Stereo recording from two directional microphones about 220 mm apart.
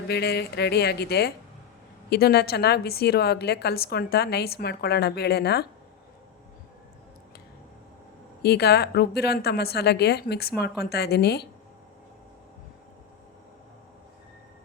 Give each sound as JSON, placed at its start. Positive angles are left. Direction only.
{"t": 0.1, "sound": "a woman's voice", "side_deg": 45}
{"t": 8.4, "sound": "a woman's voice", "side_deg": 45}